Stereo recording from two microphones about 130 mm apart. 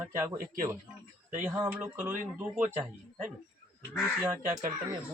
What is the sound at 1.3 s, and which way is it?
Speech, 15° right (ahead or behind).